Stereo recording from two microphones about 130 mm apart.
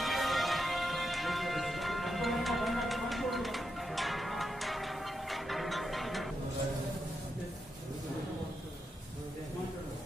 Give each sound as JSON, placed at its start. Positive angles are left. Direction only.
{"t": 0.0, "sound": "music", "side_deg": 0}